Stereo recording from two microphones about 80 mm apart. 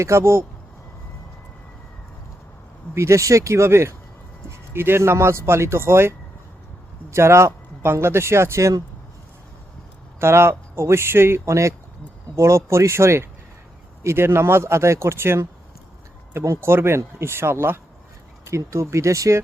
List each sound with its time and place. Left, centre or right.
0.0 s speech: right
2.9 s speech: right
10.2 s speech: right